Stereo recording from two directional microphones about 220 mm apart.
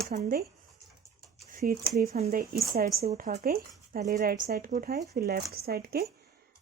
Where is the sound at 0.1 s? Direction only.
30° right (ahead or behind).